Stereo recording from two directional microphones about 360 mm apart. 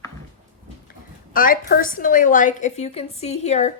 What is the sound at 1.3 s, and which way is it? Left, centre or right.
A woman's voice, left.